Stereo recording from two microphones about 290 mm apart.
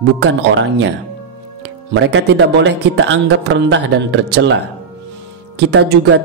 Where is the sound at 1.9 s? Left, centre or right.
Right.